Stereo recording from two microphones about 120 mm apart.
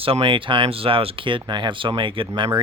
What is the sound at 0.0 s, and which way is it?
Speech, 50° right (ahead or behind).